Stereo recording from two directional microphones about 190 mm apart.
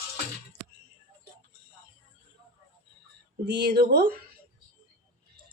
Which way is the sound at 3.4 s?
60° right (ahead or behind).